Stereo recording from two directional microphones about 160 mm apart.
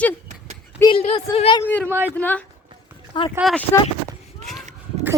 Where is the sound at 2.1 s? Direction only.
10° left (ahead or behind).